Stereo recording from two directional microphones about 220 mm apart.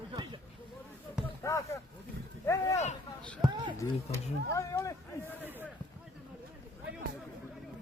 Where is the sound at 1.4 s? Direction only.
15° left (ahead or behind).